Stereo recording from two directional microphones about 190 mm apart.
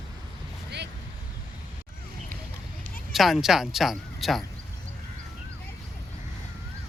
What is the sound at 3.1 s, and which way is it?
Speech, centre (ahead or behind).